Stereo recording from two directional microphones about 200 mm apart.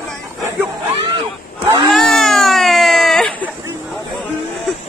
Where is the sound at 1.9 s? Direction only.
Centre (ahead or behind).